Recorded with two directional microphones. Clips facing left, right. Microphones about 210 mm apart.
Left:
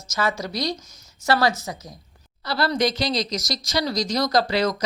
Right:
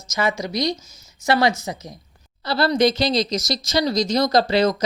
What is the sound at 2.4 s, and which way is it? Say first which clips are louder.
Speech: right 4 dB; 25° right (ahead or behind).